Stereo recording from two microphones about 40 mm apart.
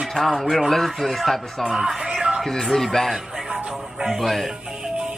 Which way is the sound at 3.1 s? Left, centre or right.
Centre.